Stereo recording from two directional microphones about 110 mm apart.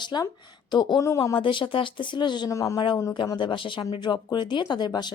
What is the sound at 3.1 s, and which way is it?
Speech, 45° left (ahead or behind).